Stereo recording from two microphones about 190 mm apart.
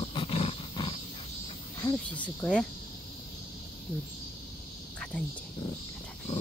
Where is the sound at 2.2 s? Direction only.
5° left (ahead or behind).